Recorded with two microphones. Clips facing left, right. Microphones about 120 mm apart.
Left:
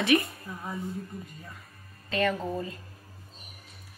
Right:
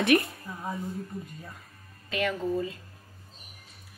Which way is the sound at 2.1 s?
10° right (ahead or behind).